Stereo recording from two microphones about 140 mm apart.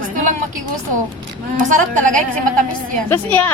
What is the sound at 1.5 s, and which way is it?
Speech, 65° right (ahead or behind).